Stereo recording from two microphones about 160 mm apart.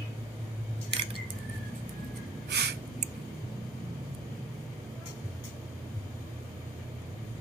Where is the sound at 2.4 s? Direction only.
90° right.